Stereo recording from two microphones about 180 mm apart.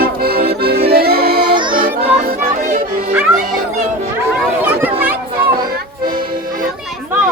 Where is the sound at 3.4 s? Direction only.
40° right (ahead or behind).